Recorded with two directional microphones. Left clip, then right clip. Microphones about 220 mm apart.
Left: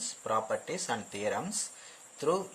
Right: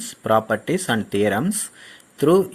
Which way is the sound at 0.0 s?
35° right (ahead or behind).